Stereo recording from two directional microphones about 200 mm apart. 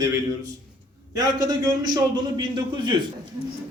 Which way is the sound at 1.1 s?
20° right (ahead or behind).